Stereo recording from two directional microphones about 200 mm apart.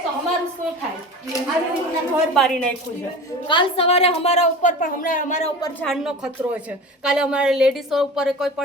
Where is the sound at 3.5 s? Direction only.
25° left (ahead or behind).